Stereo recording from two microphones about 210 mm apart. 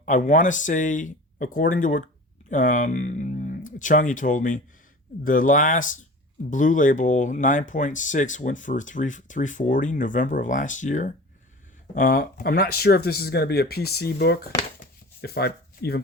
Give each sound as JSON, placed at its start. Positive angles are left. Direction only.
{"t": 0.0, "sound": "speech", "side_deg": 35}